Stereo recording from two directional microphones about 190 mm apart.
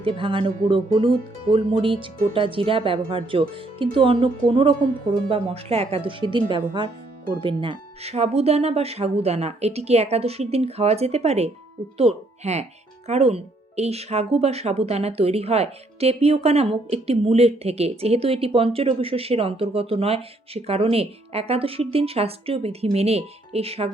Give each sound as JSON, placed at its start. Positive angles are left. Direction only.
{"t": 0.0, "sound": "speech", "side_deg": -25}